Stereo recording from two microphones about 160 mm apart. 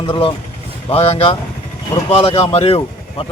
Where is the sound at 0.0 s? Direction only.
35° left (ahead or behind).